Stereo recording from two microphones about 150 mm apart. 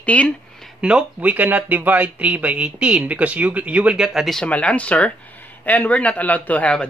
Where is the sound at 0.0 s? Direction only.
10° left (ahead or behind).